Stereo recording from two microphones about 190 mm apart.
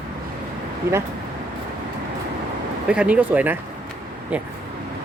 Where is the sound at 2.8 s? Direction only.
5° right (ahead or behind).